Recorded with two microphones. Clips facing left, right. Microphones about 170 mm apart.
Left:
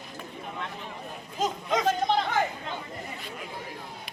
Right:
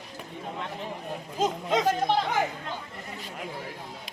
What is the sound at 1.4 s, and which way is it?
Speech, 25° right (ahead or behind).